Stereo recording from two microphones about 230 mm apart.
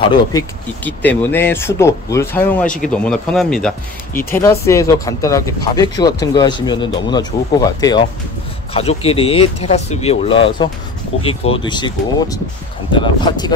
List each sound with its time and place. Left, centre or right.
0.1 s speech: centre